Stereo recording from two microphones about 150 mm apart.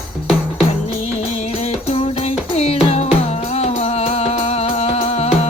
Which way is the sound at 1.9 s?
45° left (ahead or behind).